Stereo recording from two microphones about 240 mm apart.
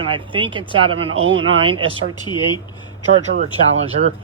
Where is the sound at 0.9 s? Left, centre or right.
Right.